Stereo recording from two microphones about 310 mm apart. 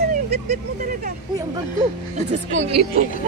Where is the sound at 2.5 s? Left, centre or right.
Right.